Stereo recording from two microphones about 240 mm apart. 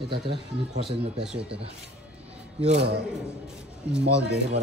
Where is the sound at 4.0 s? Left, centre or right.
Right.